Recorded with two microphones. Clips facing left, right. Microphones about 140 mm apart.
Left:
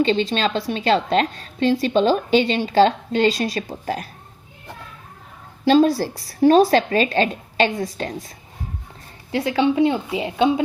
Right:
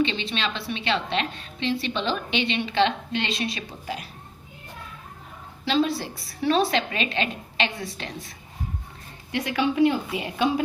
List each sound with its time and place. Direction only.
0.0 s a woman's voice: 40° left (ahead or behind)
5.6 s a woman's voice: 45° left (ahead or behind)
9.3 s a woman's voice: 30° left (ahead or behind)